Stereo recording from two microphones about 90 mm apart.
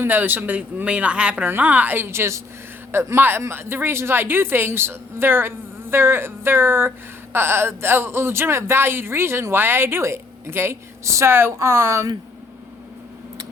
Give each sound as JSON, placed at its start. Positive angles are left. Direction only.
{"t": 0.0, "sound": "speech", "side_deg": -20}